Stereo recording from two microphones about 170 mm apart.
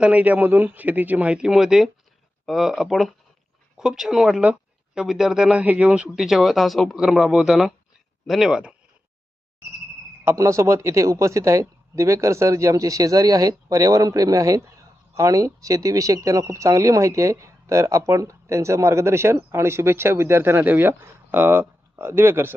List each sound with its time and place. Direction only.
0.0 s speech: 10° right (ahead or behind)
10.2 s speech: 15° right (ahead or behind)